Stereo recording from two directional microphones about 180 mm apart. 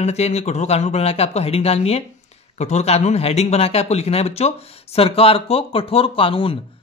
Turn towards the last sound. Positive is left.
turn(degrees=30)  # may be behind; listen again after turning